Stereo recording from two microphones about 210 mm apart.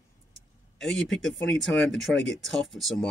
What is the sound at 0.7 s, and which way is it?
Speech, centre (ahead or behind).